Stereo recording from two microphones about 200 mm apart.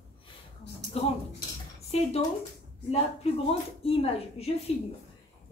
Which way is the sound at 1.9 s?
30° left (ahead or behind).